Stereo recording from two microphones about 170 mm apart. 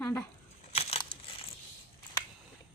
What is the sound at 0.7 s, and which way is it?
Crumpling, 35° left (ahead or behind).